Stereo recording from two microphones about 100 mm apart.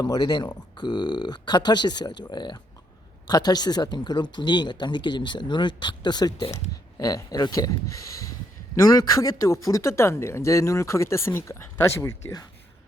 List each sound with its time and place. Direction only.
0.0 s speech: 45° left (ahead or behind)
9.0 s speech: 35° left (ahead or behind)